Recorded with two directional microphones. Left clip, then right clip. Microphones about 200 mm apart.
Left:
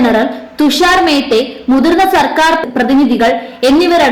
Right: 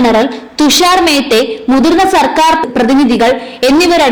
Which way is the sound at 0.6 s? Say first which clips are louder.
Right 1 dB; 25° right (ahead or behind).